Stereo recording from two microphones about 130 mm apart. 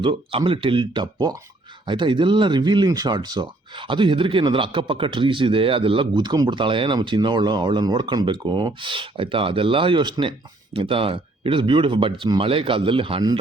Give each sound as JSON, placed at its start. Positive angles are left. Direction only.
{"t": 0.0, "sound": "speech", "side_deg": -40}
{"t": 1.0, "sound": "speech", "side_deg": -30}